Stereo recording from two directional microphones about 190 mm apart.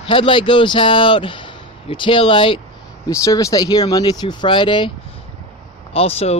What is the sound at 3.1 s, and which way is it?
Speech, 15° left (ahead or behind).